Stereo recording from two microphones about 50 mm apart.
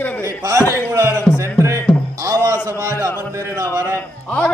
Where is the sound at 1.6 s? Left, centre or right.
Right.